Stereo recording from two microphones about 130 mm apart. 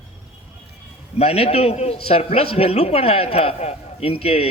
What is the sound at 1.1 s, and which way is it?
A man's voice, 50° left (ahead or behind).